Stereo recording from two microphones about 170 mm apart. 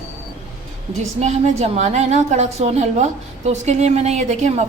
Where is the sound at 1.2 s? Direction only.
40° right (ahead or behind).